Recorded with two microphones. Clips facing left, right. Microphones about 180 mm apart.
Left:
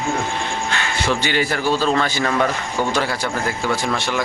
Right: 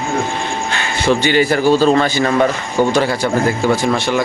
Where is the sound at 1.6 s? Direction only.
35° right (ahead or behind).